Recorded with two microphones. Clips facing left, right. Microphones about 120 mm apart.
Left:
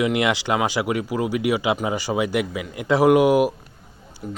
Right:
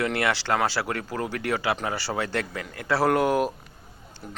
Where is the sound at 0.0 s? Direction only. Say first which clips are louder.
Left 5 dB; 15° left (ahead or behind).